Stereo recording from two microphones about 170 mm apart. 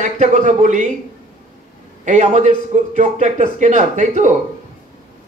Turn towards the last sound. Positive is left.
turn(degrees=-45)  # may be behind; listen again after turning